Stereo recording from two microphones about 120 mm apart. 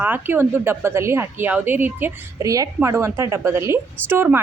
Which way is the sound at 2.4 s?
30° right (ahead or behind).